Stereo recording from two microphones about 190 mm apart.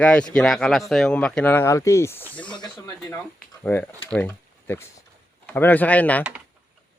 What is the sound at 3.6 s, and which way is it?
Speech, 10° left (ahead or behind).